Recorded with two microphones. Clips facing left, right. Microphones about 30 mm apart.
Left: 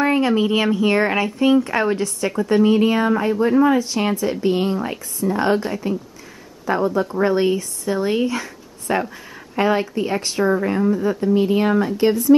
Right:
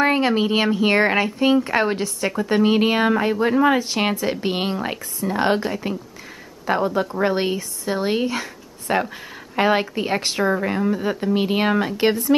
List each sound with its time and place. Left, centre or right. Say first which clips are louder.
0.0 s speech: left 1 dB; right
2.6 s speech: even; right
5.6 s speech: even; centre
6.6 s speech: left 1 dB; right
7.5 s speech: left 2 dB; centre
9.6 s speech: even; right
10.5 s speech: left 2 dB; centre
10.9 s speech: left 3 dB; right